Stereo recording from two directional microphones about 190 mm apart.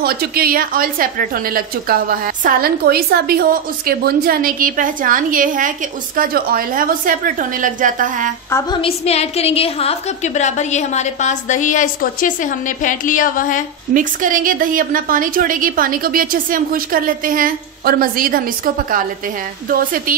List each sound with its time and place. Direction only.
0.0 s a woman's voice: 55° right (ahead or behind)
8.5 s a sound: 15° left (ahead or behind)
8.8 s a woman's voice: 35° left (ahead or behind)
13.9 s a woman's voice: 45° right (ahead or behind)
19.7 s a woman's voice: 50° right (ahead or behind)